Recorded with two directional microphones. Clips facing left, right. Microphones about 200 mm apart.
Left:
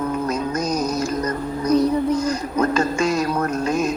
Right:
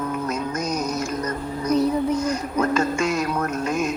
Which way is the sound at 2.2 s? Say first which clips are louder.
Left 2 dB; 35° left (ahead or behind).